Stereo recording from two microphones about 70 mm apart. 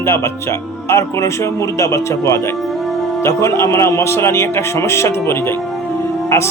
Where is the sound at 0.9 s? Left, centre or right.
Left.